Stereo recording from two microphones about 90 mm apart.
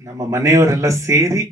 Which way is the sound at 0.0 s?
40° right (ahead or behind).